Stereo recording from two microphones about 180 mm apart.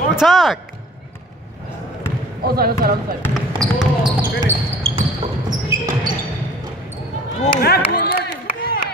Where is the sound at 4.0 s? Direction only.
25° right (ahead or behind).